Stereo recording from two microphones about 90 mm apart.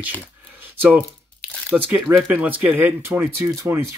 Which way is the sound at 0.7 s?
20° right (ahead or behind).